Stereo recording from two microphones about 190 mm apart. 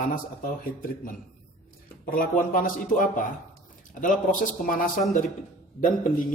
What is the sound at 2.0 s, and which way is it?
Speech, 50° left (ahead or behind).